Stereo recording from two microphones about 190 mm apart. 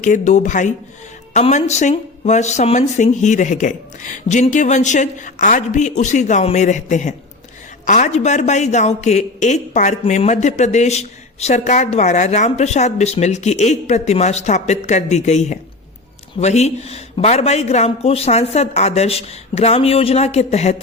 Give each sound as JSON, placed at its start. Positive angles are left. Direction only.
{"t": 0.0, "sound": "speech", "side_deg": 40}